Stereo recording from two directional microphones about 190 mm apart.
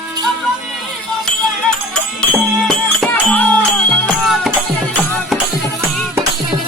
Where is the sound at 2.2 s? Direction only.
5° left (ahead or behind).